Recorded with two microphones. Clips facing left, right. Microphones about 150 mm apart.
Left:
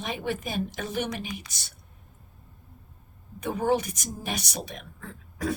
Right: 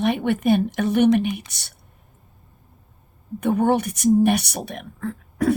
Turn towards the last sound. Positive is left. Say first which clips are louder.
# right 10 dB
turn(degrees=-60)  # may be behind; listen again after turning